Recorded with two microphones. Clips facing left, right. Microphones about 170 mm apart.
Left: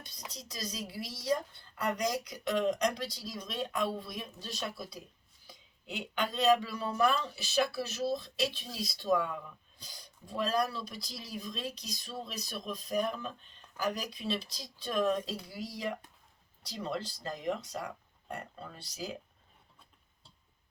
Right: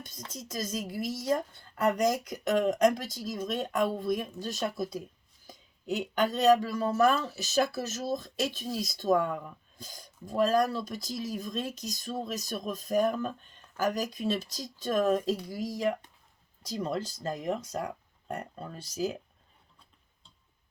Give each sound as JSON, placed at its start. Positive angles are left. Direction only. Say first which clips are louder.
{"t": 0.3, "sound": "speech", "louder": "right 6 dB", "side_deg": -45}